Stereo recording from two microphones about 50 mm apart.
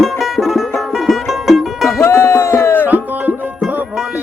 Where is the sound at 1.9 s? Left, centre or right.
Left.